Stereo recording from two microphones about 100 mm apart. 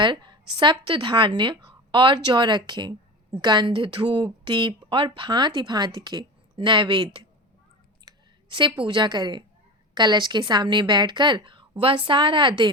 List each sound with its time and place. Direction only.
0.0 s a woman's voice: 50° right (ahead or behind)